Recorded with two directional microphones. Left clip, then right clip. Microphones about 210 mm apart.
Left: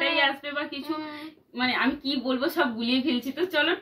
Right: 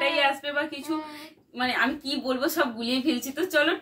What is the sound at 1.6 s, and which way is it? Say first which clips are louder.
A woman's voice: even; 15° right (ahead or behind).